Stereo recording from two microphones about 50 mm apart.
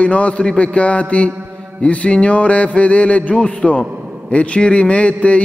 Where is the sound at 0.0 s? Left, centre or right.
Left.